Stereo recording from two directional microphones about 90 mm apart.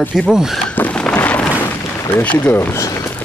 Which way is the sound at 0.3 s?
5° right (ahead or behind).